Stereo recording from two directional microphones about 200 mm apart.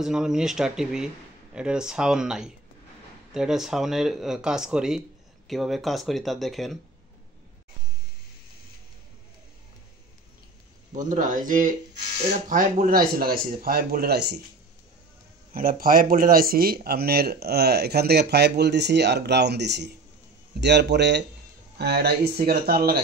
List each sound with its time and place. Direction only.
0.0 s speech: 5° right (ahead or behind)
10.9 s speech: 40° right (ahead or behind); by 14.4 s 55° right (ahead or behind)
15.5 s speech: 45° right (ahead or behind)